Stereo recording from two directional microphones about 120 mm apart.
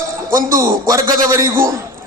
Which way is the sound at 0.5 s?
25° right (ahead or behind).